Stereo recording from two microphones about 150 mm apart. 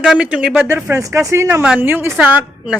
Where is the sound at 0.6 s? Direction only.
15° right (ahead or behind).